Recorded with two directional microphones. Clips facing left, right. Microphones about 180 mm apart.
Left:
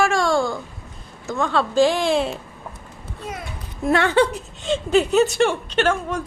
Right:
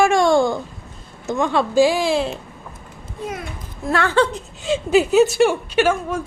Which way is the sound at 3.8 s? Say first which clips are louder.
Left 1 dB; 20° left (ahead or behind).